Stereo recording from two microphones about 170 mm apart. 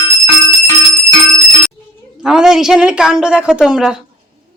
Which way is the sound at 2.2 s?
5° right (ahead or behind).